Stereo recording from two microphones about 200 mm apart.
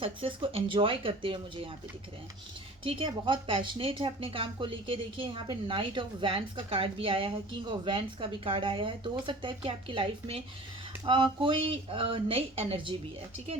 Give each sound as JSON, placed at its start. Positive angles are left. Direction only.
{"t": 0.0, "sound": "speech", "side_deg": -25}
{"t": 2.8, "sound": "speech", "side_deg": -25}